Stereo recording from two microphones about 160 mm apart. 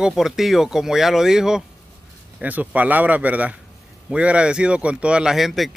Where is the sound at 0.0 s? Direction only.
5° right (ahead or behind).